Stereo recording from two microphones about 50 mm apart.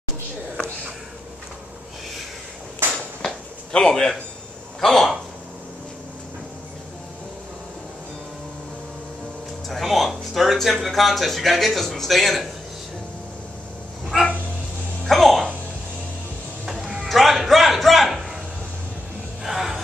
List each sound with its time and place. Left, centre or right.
2.8 s a sound: right
3.7 s a man's voice: centre
4.7 s a sound: centre
9.7 s speech: centre
14.0 s dog: centre
15.0 s music: centre
16.6 s music: centre
17.0 s music: centre
19.4 s music: centre